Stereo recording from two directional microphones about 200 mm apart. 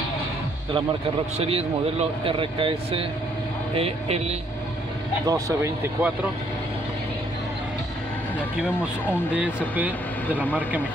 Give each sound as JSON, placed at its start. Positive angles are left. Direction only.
{"t": 1.4, "sound": "speech", "side_deg": -30}
{"t": 5.2, "sound": "speech", "side_deg": -15}
{"t": 9.3, "sound": "speech", "side_deg": -5}